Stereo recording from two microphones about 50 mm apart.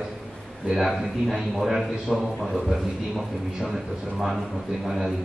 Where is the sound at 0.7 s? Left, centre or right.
Centre.